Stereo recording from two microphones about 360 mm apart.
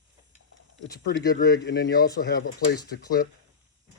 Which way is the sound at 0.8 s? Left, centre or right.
Left.